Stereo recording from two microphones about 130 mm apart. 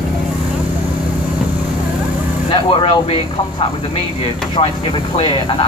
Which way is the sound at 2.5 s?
40° left (ahead or behind).